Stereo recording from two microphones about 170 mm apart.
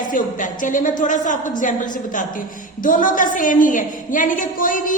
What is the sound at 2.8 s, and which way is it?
A woman's voice, 55° left (ahead or behind).